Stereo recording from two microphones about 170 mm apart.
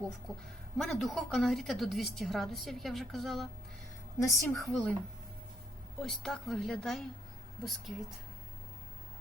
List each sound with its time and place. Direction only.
0.8 s a woman's voice: centre (ahead or behind)
4.2 s a woman's voice: 15° left (ahead or behind)
4.7 s a woman's voice: 10° left (ahead or behind)
6.0 s a woman's voice: centre (ahead or behind)